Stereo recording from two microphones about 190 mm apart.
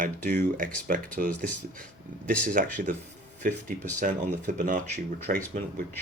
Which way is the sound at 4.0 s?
40° right (ahead or behind).